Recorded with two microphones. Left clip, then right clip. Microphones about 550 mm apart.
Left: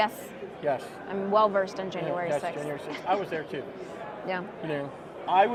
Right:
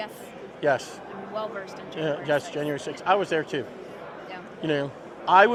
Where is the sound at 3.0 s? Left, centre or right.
Right.